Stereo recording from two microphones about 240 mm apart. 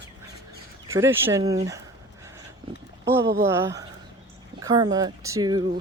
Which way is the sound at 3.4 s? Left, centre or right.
Centre.